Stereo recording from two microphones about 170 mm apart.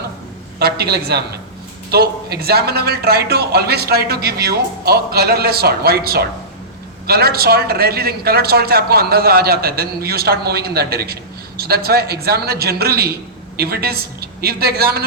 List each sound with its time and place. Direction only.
0.6 s a man's voice: 70° right (ahead or behind)